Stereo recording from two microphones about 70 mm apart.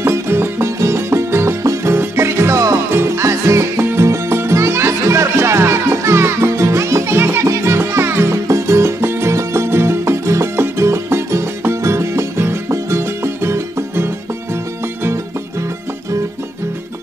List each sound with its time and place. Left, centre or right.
0.0 s music: right